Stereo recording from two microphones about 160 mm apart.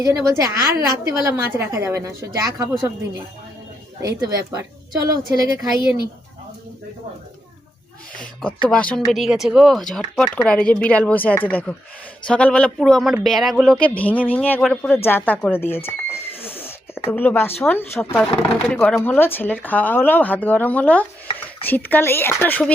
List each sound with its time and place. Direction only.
0.0 s a woman's voice: 20° right (ahead or behind)
4.0 s a woman's voice: 20° right (ahead or behind)
8.2 s speech: 5° left (ahead or behind)
16.4 s a sound: 15° left (ahead or behind)
17.1 s speech: 10° left (ahead or behind)